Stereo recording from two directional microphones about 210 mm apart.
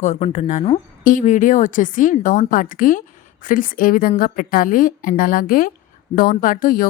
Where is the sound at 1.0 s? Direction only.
35° left (ahead or behind).